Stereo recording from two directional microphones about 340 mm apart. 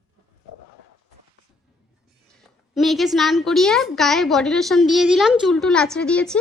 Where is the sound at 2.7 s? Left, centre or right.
Centre.